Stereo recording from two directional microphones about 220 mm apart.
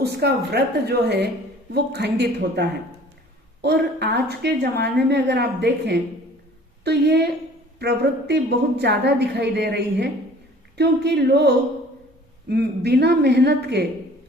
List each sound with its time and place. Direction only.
0.0 s a woman's voice: 45° right (ahead or behind)